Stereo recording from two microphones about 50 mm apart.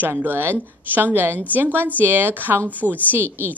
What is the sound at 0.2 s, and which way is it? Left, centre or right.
A woman's voice, right.